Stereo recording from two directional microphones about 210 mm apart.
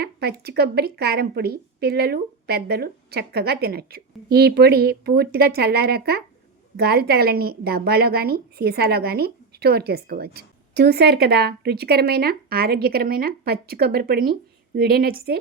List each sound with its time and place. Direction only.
0.0 s a woman's voice: 50° right (ahead or behind)